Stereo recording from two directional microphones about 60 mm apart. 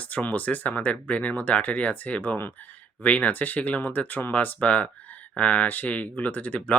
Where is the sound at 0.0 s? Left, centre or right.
Left.